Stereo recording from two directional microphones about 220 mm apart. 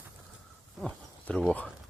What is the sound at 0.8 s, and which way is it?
Speech, 5° left (ahead or behind).